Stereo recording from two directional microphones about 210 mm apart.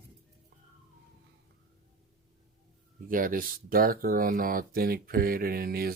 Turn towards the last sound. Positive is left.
turn(degrees=-45)  # may be behind; listen again after turning